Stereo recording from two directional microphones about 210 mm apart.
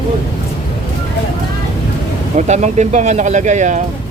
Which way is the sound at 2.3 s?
35° right (ahead or behind).